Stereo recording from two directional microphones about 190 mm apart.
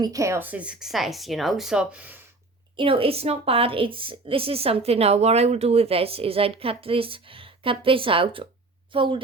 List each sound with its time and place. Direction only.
0.0 s speech: 15° right (ahead or behind)
2.7 s a woman's voice: 30° right (ahead or behind)